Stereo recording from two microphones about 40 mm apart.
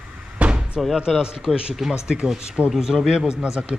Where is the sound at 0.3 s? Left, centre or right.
Right.